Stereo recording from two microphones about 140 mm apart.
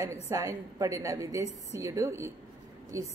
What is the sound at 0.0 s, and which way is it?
A woman's voice, 20° right (ahead or behind).